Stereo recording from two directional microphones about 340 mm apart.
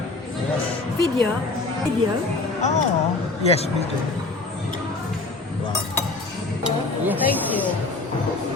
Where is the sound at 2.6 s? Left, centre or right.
Left.